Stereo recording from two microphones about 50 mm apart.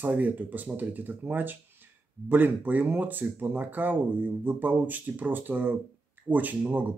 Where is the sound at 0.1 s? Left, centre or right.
Right.